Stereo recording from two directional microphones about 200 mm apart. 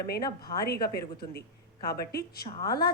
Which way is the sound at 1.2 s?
50° left (ahead or behind).